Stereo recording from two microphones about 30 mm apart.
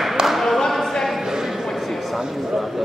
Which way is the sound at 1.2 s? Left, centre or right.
Centre.